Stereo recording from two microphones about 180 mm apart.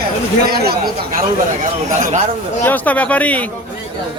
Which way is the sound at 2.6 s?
10° left (ahead or behind).